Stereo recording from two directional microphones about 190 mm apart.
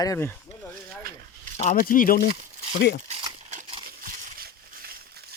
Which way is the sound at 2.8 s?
65° left (ahead or behind).